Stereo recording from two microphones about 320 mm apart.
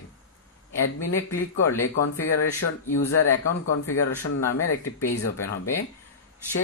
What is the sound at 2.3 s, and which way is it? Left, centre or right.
Speech, left.